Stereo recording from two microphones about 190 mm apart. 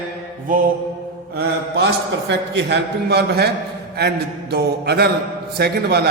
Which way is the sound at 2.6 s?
65° right (ahead or behind).